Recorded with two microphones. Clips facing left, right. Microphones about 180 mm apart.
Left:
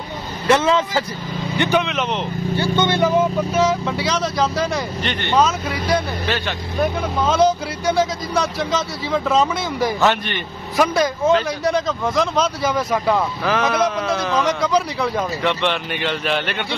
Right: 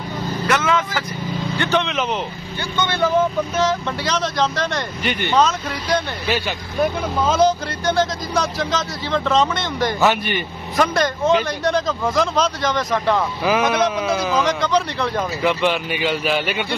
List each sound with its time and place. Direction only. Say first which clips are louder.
0.5 s speech: left 5 dB; 30° left (ahead or behind)
1.6 s speech: left 2 dB; 10° left (ahead or behind)
2.7 s speech: left 2 dB; 20° left (ahead or behind)
3.5 s speech: left 2 dB; 5° left (ahead or behind)
9.9 s speech: right 1 dB; 5° right (ahead or behind)
10.8 s speech: left 1 dB; 5° left (ahead or behind)
13.4 s speech: right 1 dB; 5° right (ahead or behind)